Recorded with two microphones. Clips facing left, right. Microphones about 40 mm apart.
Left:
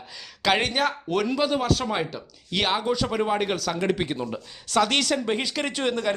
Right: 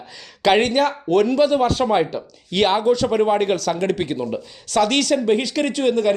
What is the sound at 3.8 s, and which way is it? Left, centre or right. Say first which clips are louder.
A man's voice: right 4 dB; centre.